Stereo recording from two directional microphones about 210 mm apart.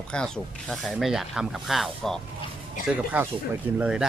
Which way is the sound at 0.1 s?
5° left (ahead or behind).